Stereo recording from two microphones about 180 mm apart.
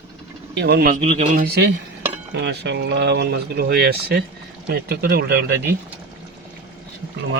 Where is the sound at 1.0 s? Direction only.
40° right (ahead or behind).